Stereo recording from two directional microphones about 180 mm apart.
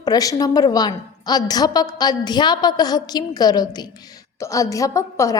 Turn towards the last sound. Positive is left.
turn(degrees=15)  # may be behind; listen again after turning